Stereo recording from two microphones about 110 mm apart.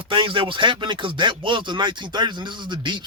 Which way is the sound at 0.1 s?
50° right (ahead or behind).